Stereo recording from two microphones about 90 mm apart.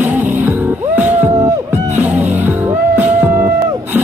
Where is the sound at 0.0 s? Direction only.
20° right (ahead or behind).